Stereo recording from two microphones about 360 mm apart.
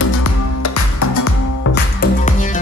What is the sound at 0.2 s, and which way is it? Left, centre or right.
Music, left.